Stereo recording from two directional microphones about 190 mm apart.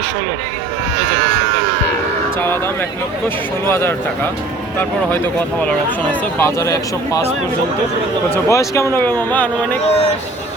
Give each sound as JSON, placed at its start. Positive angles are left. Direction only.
{"t": 3.7, "sound": "speech", "side_deg": 10}
{"t": 6.4, "sound": "speech", "side_deg": 15}
{"t": 8.4, "sound": "speech", "side_deg": 15}